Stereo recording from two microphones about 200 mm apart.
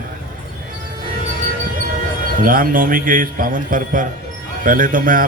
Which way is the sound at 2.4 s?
45° right (ahead or behind).